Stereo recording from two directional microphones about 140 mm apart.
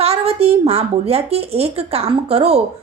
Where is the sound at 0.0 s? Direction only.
45° right (ahead or behind).